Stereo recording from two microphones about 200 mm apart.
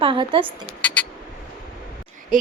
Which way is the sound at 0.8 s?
5° left (ahead or behind).